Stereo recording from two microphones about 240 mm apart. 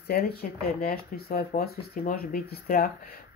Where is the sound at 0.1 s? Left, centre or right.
Left.